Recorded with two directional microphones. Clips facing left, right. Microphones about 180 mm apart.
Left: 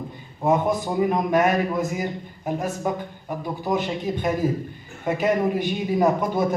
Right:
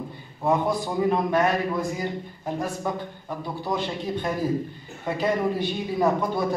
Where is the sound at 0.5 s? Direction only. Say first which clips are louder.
Left 2 dB; 20° left (ahead or behind).